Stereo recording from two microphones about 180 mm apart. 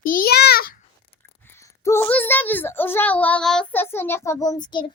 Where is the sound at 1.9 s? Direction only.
10° left (ahead or behind).